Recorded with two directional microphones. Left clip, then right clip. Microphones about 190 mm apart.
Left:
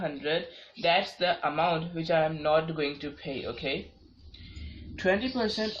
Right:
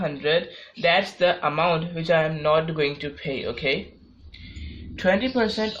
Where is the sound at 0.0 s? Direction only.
45° right (ahead or behind).